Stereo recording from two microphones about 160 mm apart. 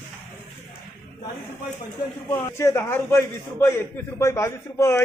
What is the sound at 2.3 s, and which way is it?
A man's voice, 15° left (ahead or behind).